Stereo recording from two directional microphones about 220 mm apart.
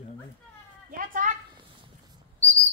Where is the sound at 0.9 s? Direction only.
40° right (ahead or behind).